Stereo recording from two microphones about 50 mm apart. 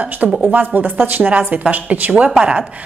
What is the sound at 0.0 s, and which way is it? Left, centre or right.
A woman's voice, right.